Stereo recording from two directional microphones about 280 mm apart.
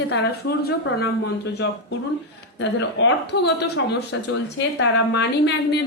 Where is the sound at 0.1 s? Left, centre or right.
Left.